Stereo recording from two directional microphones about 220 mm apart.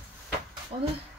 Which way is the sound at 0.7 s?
25° right (ahead or behind).